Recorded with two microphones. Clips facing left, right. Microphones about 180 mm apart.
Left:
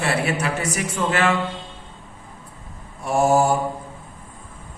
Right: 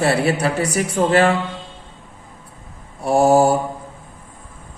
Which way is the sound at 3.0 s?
35° right (ahead or behind).